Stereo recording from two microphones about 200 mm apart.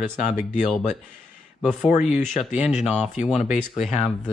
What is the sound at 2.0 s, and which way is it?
Speech, centre (ahead or behind).